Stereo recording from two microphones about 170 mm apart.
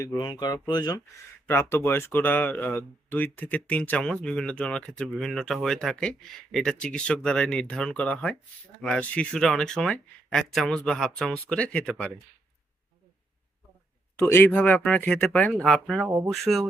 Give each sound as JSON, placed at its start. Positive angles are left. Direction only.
{"t": 0.0, "sound": "speech", "side_deg": 20}
{"t": 14.2, "sound": "speech", "side_deg": 15}
{"t": 16.0, "sound": "speech", "side_deg": -15}
{"t": 16.3, "sound": "speech", "side_deg": 0}